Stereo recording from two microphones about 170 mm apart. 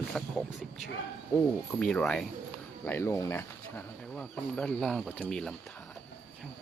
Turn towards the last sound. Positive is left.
turn(degrees=5)  # may be behind; listen again after turning